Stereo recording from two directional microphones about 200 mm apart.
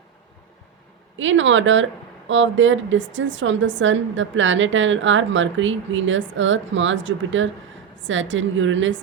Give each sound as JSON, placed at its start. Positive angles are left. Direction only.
{"t": 1.2, "sound": "speech", "side_deg": -70}